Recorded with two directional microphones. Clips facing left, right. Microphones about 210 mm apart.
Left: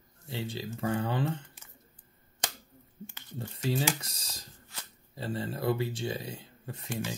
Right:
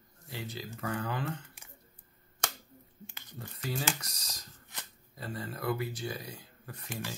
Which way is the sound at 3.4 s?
25° left (ahead or behind).